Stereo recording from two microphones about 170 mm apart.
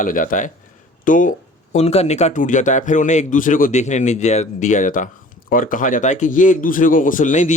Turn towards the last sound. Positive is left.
turn(degrees=45)  # may be behind; listen again after turning